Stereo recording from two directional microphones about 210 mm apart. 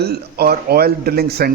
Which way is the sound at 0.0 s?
50° right (ahead or behind).